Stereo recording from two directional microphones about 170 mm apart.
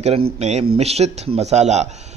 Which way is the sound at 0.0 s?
40° right (ahead or behind).